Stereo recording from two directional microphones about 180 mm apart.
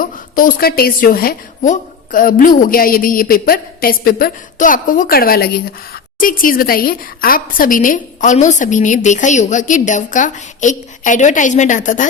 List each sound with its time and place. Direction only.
0.0 s a woman's voice: 50° left (ahead or behind)